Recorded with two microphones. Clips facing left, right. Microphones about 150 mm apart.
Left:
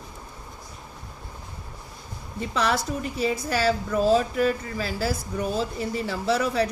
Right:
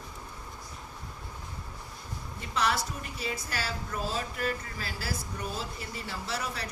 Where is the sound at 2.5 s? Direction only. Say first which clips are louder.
Left 5 dB; 90° left.